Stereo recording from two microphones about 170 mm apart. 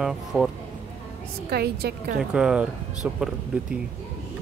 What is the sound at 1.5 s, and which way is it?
Speech, 65° right (ahead or behind).